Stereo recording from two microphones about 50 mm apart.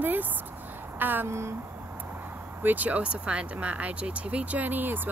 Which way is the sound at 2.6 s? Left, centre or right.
Right.